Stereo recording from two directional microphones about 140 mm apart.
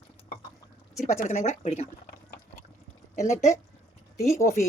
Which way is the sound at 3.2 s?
60° left (ahead or behind).